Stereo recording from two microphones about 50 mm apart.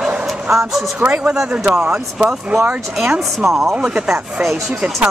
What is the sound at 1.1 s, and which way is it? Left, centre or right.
Speech, centre.